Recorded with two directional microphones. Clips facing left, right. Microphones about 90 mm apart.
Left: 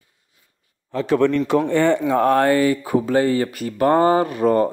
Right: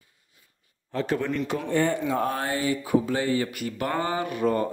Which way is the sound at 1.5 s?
75° left (ahead or behind).